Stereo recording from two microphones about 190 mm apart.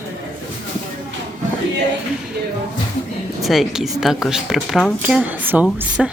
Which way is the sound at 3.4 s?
Centre (ahead or behind).